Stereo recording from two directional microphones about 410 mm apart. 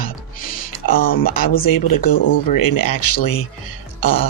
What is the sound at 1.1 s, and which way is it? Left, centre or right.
Speech, left.